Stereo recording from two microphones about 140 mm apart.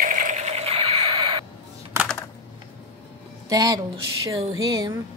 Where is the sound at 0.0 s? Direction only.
70° right (ahead or behind); by 1.4 s 35° right (ahead or behind).